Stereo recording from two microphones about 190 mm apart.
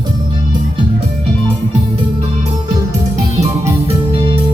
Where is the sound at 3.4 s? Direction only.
30° right (ahead or behind).